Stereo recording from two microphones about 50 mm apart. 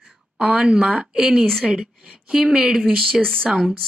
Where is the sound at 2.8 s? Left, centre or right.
Centre.